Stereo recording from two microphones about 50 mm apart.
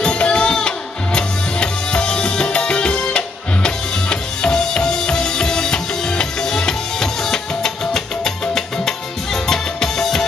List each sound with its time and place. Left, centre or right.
0.0 s music: centre